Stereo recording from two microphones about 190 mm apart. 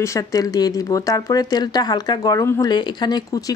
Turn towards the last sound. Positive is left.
turn(degrees=20)  # may be behind; listen again after turning